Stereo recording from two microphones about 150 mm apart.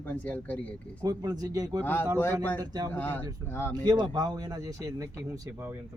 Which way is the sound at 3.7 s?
25° right (ahead or behind).